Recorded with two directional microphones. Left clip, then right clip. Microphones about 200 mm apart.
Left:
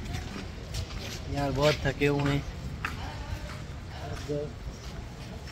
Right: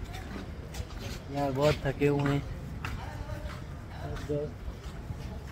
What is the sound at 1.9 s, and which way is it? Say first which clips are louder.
Speech: left 1 dB; 5° left (ahead or behind).